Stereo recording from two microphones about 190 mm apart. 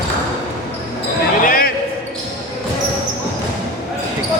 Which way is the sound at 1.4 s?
50° left (ahead or behind).